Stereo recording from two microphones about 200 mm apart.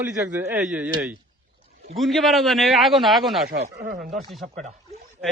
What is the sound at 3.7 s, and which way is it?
Speech, 55° right (ahead or behind).